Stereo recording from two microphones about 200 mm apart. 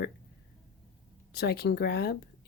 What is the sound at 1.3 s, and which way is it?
Speech, 55° left (ahead or behind).